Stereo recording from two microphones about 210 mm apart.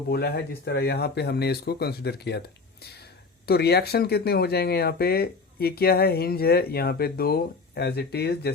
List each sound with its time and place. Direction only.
0.1 s speech: 50° left (ahead or behind)
3.4 s speech: 50° left (ahead or behind)